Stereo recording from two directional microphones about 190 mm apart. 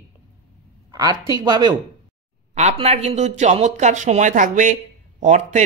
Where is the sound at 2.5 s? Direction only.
35° right (ahead or behind).